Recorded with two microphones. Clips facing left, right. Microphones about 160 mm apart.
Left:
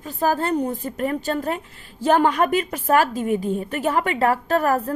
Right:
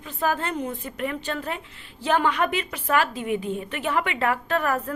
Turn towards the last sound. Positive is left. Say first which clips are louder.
# left 5 dB
turn(degrees=40)  # may be behind; listen again after turning